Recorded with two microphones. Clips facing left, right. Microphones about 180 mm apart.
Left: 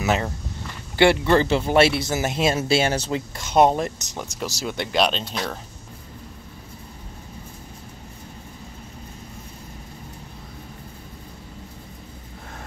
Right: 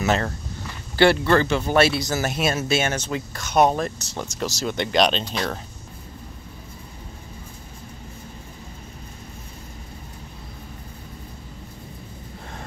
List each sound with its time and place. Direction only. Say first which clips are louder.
0.0 s speech: right 1 dB; 10° left (ahead or behind)
0.9 s speech: even; 20° left (ahead or behind)
4.2 s speech: right 2 dB; 10° left (ahead or behind)